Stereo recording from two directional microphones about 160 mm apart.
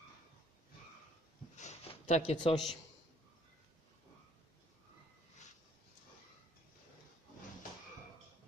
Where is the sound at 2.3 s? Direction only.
30° left (ahead or behind).